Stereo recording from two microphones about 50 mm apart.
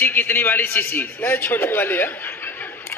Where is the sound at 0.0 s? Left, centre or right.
Left.